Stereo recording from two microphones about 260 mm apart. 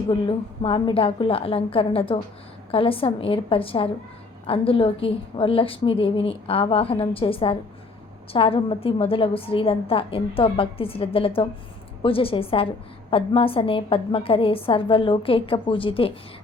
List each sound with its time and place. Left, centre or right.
0.1 s a woman's voice: left